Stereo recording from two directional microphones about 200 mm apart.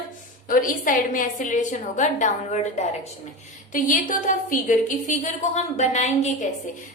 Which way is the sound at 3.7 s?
40° left (ahead or behind).